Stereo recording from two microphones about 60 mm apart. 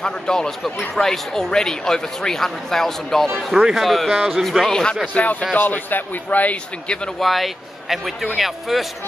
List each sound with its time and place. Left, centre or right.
0.0 s speech: centre
5.1 s a man's voice: left
7.2 s speech: centre